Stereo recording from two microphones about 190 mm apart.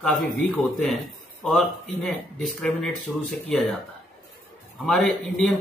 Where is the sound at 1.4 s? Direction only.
5° left (ahead or behind).